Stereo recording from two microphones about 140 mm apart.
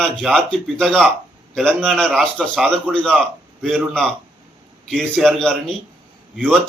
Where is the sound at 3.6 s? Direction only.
10° right (ahead or behind).